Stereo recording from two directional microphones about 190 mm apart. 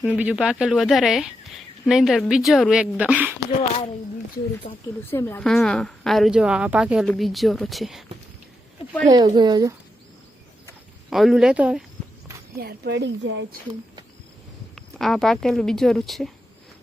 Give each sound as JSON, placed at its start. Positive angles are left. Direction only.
{"t": 0.0, "sound": "a woman's voice", "side_deg": -5}
{"t": 4.7, "sound": "speech", "side_deg": 40}
{"t": 5.1, "sound": "a woman's voice", "side_deg": 10}
{"t": 9.0, "sound": "speech", "side_deg": -20}
{"t": 11.1, "sound": "a woman's voice", "side_deg": 0}
{"t": 12.5, "sound": "speech", "side_deg": -55}
{"t": 14.8, "sound": "a woman's voice", "side_deg": 0}